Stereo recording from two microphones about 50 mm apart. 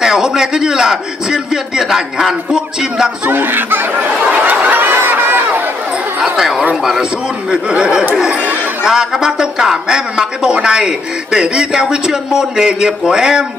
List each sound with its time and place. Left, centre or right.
0.0 s a man's voice: centre
3.3 s speech: right
4.3 s chatter: right
6.2 s a sound: centre
7.5 s speech: centre